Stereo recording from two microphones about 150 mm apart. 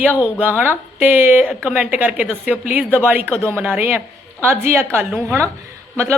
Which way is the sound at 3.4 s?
5° left (ahead or behind).